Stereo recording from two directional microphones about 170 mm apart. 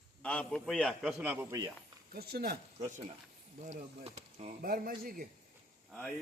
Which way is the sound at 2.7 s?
45° right (ahead or behind).